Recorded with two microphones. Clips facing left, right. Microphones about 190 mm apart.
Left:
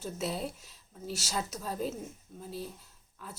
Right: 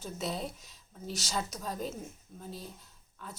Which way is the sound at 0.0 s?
5° left (ahead or behind).